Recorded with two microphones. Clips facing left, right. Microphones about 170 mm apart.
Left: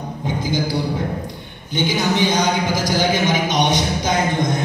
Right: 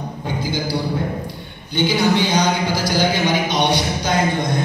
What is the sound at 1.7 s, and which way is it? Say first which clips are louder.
Speech: right 2 dB; 20° left (ahead or behind).